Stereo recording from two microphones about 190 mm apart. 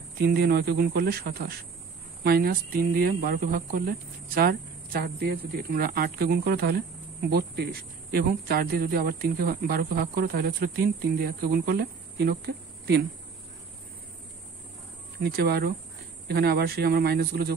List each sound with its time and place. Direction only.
0.2 s speech: 55° right (ahead or behind)
15.2 s speech: 55° right (ahead or behind)